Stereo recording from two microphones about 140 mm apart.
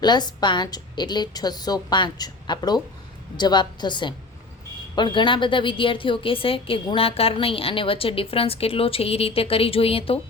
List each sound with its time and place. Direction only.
0.0 s a woman's voice: 30° left (ahead or behind)